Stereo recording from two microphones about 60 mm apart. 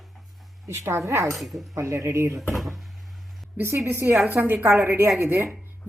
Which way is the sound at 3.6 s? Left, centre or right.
Right.